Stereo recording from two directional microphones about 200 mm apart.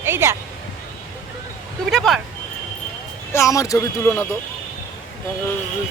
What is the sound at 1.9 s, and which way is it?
Speech, centre (ahead or behind).